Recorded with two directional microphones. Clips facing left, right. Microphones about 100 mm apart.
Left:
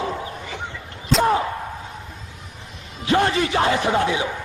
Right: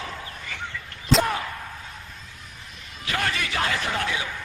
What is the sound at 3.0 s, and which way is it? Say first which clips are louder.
A man's voice: left 9 dB; 25° left (ahead or behind).